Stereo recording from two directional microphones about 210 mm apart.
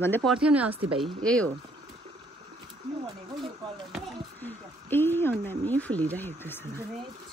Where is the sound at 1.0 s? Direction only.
5° left (ahead or behind).